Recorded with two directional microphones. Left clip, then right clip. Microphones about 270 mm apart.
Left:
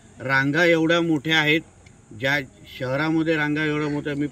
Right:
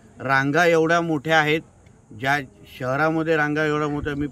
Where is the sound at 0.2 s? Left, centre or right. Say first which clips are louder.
Right 1 dB; centre.